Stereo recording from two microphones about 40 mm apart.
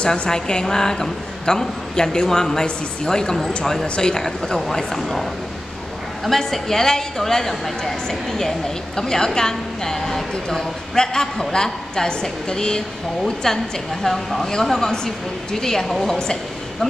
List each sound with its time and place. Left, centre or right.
0.0 s a woman's voice: left
14.0 s a woman's voice: centre